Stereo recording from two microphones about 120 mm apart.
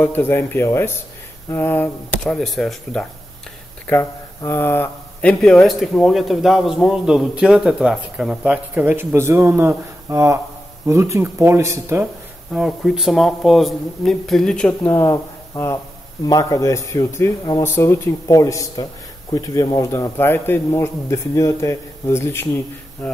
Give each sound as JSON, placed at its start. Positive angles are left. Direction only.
{"t": 0.0, "sound": "a man's voice", "side_deg": 15}
{"t": 2.2, "sound": "a man's voice", "side_deg": 5}
{"t": 4.4, "sound": "a man's voice", "side_deg": 20}
{"t": 8.5, "sound": "speech", "side_deg": -15}
{"t": 12.5, "sound": "a man's voice", "side_deg": -5}
{"t": 14.9, "sound": "a man's voice", "side_deg": 25}